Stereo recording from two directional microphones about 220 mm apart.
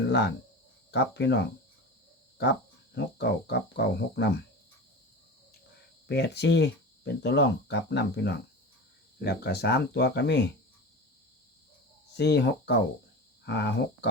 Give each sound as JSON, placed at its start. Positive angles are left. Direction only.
{"t": 0.9, "sound": "speech", "side_deg": 50}
{"t": 6.1, "sound": "speech", "side_deg": 50}
{"t": 12.1, "sound": "speech", "side_deg": 50}
{"t": 13.4, "sound": "cricket", "side_deg": 50}